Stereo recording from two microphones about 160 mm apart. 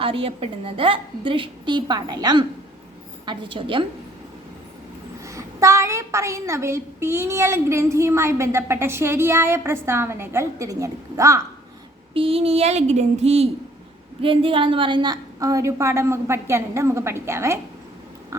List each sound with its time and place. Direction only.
0.0 s a woman's voice: 35° right (ahead or behind)
5.2 s a woman's voice: 20° right (ahead or behind)
12.1 s a woman's voice: 35° right (ahead or behind); by 17.6 s 15° right (ahead or behind)